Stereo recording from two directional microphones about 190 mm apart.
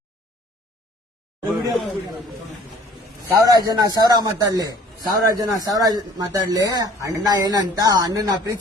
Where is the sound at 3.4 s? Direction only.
20° right (ahead or behind).